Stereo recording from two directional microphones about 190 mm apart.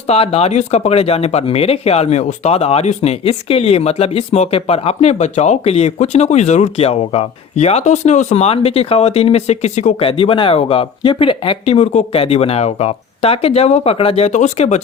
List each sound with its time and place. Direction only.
0.1 s speech: 30° left (ahead or behind)